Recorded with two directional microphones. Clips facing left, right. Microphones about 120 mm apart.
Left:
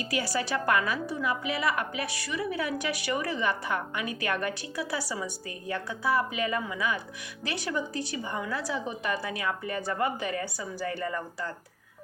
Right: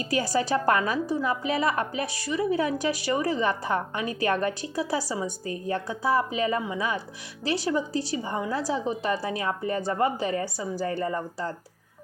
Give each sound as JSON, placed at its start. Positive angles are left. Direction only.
{"t": 0.0, "sound": "a woman's voice", "side_deg": -40}